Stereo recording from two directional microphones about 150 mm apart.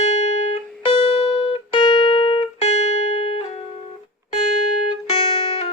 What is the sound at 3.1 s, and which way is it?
Music, 40° left (ahead or behind).